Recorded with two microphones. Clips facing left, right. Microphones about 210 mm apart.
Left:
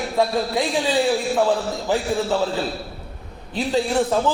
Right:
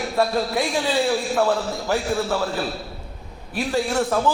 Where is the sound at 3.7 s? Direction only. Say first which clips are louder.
Left 2 dB; 20° left (ahead or behind).